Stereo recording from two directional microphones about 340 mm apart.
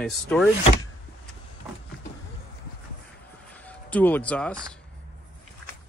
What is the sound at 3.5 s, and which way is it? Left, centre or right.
Speech, centre.